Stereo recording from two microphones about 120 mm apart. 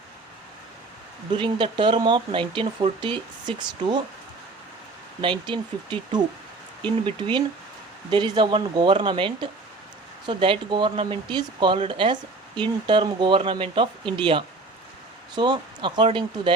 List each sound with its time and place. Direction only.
1.3 s speech: 40° right (ahead or behind)
5.2 s speech: 40° right (ahead or behind)